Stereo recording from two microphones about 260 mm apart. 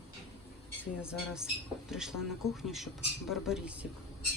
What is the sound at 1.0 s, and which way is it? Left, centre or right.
Speech, centre.